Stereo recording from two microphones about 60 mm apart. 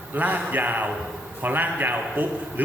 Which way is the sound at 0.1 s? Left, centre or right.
Right.